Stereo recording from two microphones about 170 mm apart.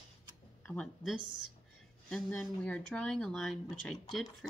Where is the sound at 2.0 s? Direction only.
5° left (ahead or behind).